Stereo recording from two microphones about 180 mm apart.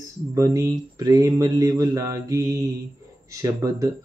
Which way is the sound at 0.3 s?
15° right (ahead or behind).